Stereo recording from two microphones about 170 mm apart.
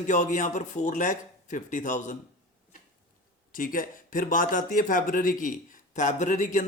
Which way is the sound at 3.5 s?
55° left (ahead or behind).